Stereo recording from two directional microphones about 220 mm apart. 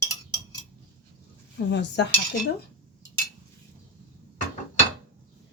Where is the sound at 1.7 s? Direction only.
50° left (ahead or behind).